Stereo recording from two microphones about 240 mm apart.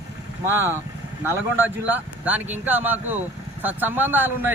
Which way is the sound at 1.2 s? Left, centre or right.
Centre.